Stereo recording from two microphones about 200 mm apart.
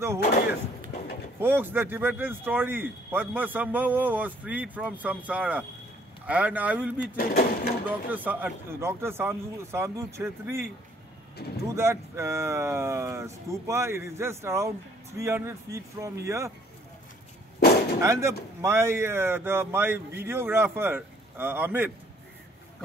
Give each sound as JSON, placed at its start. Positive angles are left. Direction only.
{"t": 1.4, "sound": "speech", "side_deg": -10}
{"t": 7.2, "sound": "speech", "side_deg": 50}
{"t": 7.8, "sound": "speech", "side_deg": -10}
{"t": 11.4, "sound": "speech", "side_deg": 50}
{"t": 11.7, "sound": "speech", "side_deg": -15}
{"t": 18.0, "sound": "speech", "side_deg": -15}